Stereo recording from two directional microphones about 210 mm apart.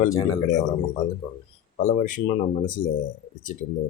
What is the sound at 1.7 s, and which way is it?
Speech, 35° left (ahead or behind).